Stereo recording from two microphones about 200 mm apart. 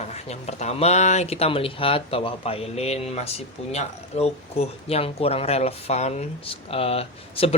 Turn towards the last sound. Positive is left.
turn(degrees=30)  # may be behind; listen again after turning